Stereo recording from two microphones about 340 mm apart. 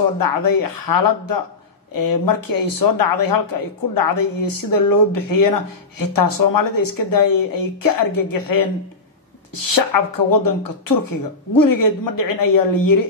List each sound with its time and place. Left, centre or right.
0.2 s speech: left
9.8 s speech: left